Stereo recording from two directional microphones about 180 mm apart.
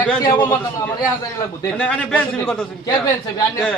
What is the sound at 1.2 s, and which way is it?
Speech, 20° left (ahead or behind).